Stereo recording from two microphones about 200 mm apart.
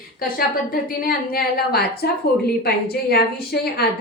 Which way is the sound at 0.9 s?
50° left (ahead or behind).